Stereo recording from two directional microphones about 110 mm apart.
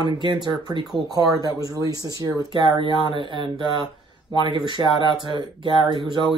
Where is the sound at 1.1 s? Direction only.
35° right (ahead or behind).